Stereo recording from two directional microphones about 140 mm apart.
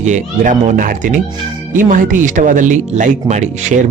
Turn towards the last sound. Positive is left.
turn(degrees=-55)  # may be behind; listen again after turning